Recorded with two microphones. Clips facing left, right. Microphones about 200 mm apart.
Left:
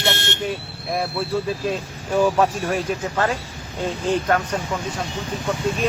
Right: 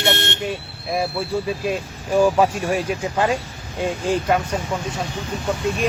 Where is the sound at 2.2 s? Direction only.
5° right (ahead or behind).